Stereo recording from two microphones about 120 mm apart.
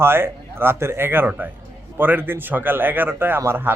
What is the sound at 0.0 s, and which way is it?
A man's voice, 20° right (ahead or behind).